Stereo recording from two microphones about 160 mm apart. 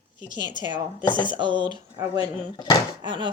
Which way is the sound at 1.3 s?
30° right (ahead or behind).